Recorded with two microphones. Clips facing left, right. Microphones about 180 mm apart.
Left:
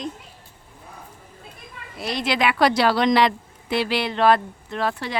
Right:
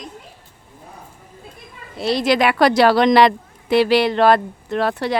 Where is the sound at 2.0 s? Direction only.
35° right (ahead or behind).